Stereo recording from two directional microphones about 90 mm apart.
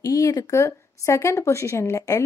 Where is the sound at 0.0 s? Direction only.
40° left (ahead or behind).